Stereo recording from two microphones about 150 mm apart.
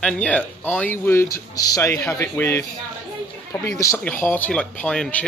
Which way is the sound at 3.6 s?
20° left (ahead or behind).